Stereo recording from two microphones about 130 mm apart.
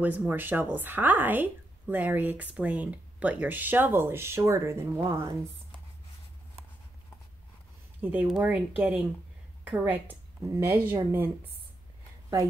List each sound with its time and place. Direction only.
0.0 s a woman's voice: 15° right (ahead or behind)
8.0 s a woman's voice: 15° right (ahead or behind)